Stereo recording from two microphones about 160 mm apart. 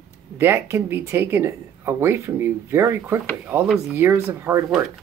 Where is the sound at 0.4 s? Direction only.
15° right (ahead or behind).